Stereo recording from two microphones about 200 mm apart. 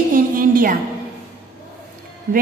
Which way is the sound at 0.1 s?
45° right (ahead or behind).